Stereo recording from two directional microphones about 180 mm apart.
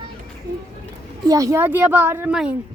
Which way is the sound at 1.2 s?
20° right (ahead or behind).